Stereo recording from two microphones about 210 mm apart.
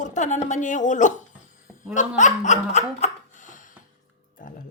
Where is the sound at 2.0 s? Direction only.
35° left (ahead or behind).